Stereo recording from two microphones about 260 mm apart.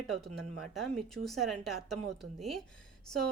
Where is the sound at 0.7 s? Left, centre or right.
Centre.